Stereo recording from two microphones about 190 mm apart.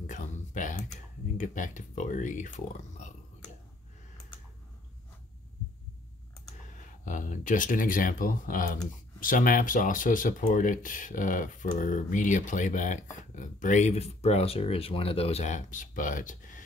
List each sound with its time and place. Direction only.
0.0 s typing: 40° left (ahead or behind)
1.4 s speech: 40° left (ahead or behind)
7.1 s speech: 40° left (ahead or behind)